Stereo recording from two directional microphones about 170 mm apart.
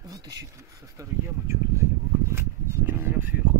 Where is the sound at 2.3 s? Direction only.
15° right (ahead or behind).